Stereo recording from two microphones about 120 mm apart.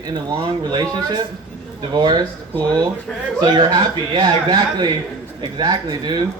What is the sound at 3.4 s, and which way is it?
Speech, 35° right (ahead or behind).